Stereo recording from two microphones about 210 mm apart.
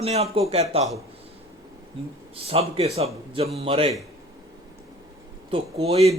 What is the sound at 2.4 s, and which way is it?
A man's voice, 30° right (ahead or behind).